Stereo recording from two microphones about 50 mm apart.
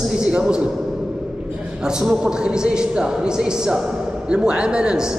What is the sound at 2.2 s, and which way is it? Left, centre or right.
A man's voice, centre.